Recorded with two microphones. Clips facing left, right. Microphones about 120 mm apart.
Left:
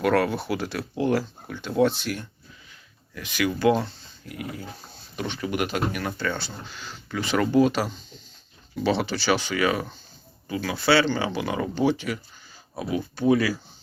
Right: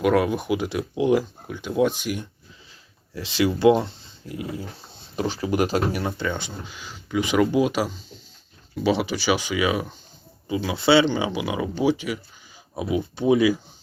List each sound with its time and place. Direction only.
0.0 s speech: 10° right (ahead or behind)
3.2 s speech: 25° right (ahead or behind)
6.1 s speech: 20° right (ahead or behind)